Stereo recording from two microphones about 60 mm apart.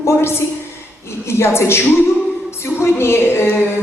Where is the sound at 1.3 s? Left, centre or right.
Left.